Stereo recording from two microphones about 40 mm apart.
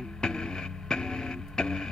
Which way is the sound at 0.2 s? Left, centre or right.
Centre.